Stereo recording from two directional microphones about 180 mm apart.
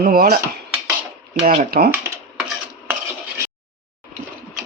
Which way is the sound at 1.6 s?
55° right (ahead or behind).